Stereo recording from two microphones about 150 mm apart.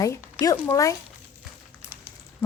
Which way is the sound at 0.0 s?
20° left (ahead or behind).